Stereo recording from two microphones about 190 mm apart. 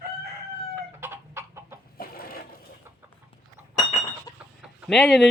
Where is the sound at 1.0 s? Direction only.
15° right (ahead or behind).